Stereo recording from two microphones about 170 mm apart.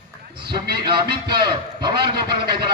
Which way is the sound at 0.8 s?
30° right (ahead or behind).